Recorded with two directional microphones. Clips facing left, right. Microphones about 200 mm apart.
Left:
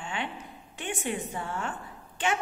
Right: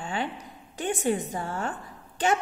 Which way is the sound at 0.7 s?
40° right (ahead or behind).